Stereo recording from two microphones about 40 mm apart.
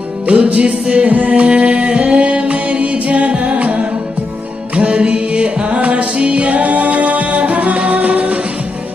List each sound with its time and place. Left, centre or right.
0.3 s music: right
1.4 s music: right